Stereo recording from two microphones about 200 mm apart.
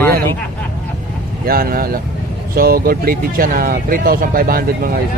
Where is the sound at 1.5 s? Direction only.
50° right (ahead or behind).